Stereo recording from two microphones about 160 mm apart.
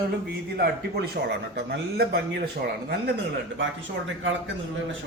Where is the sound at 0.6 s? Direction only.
85° right.